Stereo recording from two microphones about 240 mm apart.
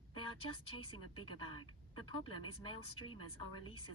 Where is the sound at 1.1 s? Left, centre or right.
Centre.